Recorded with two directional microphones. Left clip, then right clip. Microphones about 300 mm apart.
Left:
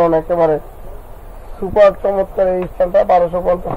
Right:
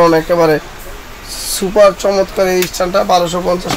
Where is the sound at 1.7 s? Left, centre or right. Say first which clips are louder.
Right 2 dB; right.